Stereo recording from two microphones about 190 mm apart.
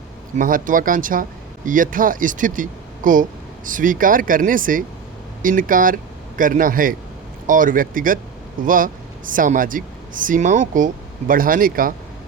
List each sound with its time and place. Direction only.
0.3 s a man's voice: 45° right (ahead or behind)